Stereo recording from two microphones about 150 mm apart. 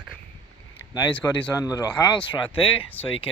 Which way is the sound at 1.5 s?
25° left (ahead or behind).